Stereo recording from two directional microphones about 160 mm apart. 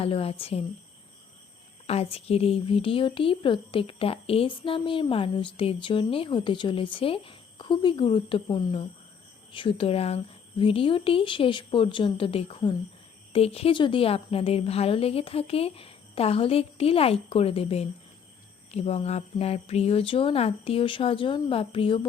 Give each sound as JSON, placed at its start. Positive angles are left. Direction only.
{"t": 0.0, "sound": "speech", "side_deg": 35}
{"t": 1.9, "sound": "speech", "side_deg": 40}